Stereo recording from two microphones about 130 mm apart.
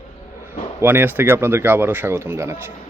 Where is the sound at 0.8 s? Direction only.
15° right (ahead or behind).